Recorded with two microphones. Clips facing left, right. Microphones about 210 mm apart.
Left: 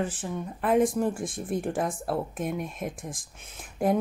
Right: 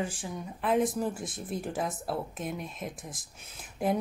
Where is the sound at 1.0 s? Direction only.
5° right (ahead or behind).